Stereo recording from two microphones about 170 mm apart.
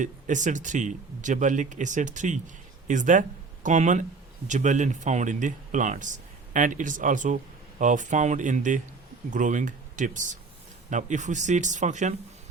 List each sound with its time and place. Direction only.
0.0 s speech: 45° right (ahead or behind)